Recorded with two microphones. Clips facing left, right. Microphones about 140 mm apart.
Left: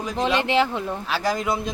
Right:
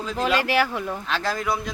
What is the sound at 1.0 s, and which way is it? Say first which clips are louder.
Speech: left 3 dB; 10° left (ahead or behind).